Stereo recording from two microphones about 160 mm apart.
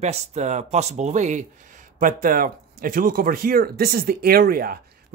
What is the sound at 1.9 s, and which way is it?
Speech, 60° right (ahead or behind).